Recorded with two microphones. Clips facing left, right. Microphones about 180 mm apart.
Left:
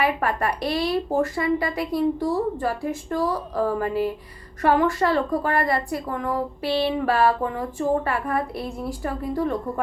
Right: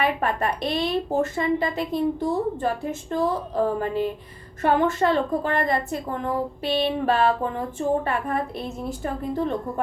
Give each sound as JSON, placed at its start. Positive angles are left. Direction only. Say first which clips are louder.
{"t": 0.0, "sound": "a woman's voice", "louder": "left 1 dB", "side_deg": -25}